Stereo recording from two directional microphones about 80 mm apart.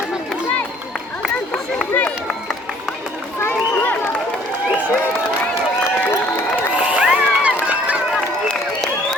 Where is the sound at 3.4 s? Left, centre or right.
Left.